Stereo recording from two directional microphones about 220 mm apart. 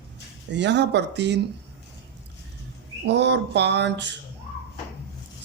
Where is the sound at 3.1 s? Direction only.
50° right (ahead or behind).